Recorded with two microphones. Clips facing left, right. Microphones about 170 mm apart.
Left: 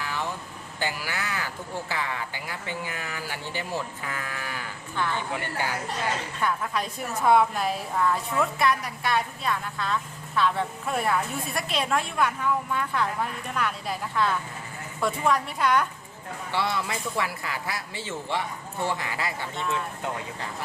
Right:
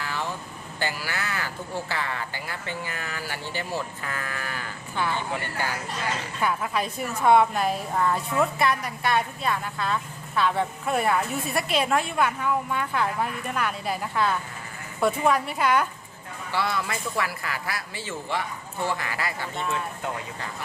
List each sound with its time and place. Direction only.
0.0 s vehicle: 15° left (ahead or behind)
0.8 s speech: 15° left (ahead or behind)
6.4 s a woman's voice: 5° right (ahead or behind)
16.5 s a man's voice: 25° left (ahead or behind)